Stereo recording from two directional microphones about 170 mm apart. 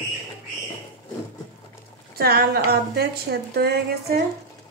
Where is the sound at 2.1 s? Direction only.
65° right (ahead or behind).